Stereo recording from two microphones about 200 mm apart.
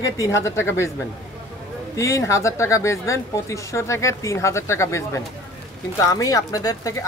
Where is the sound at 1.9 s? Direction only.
15° left (ahead or behind).